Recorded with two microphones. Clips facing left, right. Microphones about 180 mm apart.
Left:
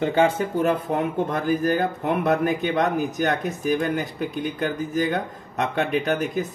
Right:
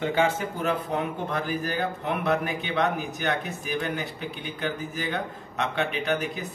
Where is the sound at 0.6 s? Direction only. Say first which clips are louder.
Left 7 dB; 45° left (ahead or behind).